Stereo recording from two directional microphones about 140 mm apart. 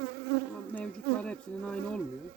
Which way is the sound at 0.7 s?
10° left (ahead or behind).